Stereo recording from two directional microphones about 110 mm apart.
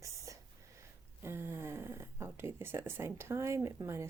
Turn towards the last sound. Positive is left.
turn(degrees=-25)  # may be behind; listen again after turning